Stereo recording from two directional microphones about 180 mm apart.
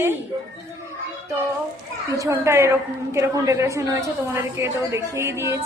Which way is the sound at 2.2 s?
15° right (ahead or behind).